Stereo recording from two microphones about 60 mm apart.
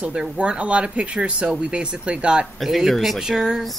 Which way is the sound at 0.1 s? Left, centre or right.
Centre.